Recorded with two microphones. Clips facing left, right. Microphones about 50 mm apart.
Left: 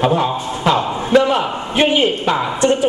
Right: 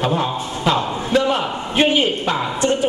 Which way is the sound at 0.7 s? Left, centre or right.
Centre.